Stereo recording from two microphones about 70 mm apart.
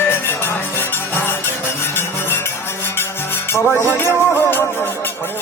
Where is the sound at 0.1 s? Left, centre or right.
Left.